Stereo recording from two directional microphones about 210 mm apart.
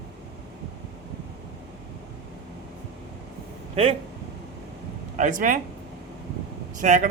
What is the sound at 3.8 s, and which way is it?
Speech, 30° right (ahead or behind).